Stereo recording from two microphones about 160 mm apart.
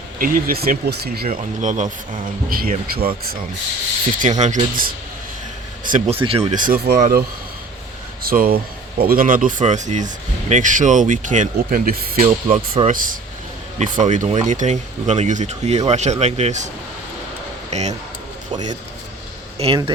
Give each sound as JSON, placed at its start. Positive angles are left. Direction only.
{"t": 0.2, "sound": "speech", "side_deg": -65}
{"t": 2.5, "sound": "speech", "side_deg": -65}
{"t": 4.2, "sound": "speech", "side_deg": -45}
{"t": 6.1, "sound": "speech", "side_deg": -35}
{"t": 6.5, "sound": "speech", "side_deg": -60}
{"t": 8.2, "sound": "speech", "side_deg": -65}
{"t": 12.2, "sound": "speech", "side_deg": -35}
{"t": 12.9, "sound": "speech", "side_deg": -55}
{"t": 17.7, "sound": "speech", "side_deg": -45}
{"t": 19.5, "sound": "speech", "side_deg": -35}